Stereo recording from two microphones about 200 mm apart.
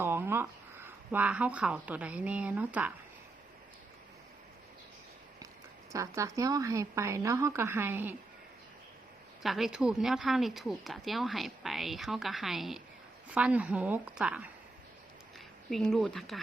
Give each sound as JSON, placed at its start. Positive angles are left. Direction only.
{"t": 0.0, "sound": "speech", "side_deg": -10}
{"t": 5.9, "sound": "a woman's voice", "side_deg": -15}
{"t": 9.4, "sound": "a woman's voice", "side_deg": 0}
{"t": 15.7, "sound": "speech", "side_deg": 0}